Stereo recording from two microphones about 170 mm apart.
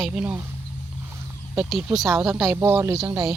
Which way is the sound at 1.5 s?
5° right (ahead or behind).